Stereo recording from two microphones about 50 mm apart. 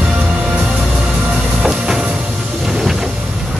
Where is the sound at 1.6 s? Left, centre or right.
Right.